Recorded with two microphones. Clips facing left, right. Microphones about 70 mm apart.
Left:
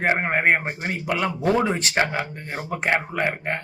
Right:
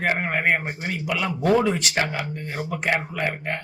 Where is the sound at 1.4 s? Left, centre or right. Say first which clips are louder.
Right 2 dB; left.